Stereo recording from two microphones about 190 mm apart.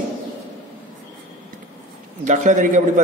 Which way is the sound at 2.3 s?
40° right (ahead or behind).